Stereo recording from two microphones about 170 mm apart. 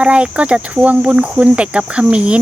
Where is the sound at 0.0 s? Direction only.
5° right (ahead or behind).